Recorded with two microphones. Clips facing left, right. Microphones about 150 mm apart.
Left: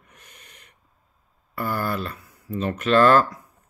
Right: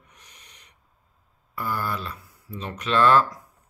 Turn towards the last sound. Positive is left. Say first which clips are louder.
# left 3 dB
turn(degrees=50)  # may be behind; listen again after turning